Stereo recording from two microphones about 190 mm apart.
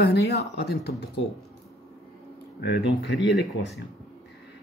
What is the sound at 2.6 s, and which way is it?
Speech, 65° left (ahead or behind).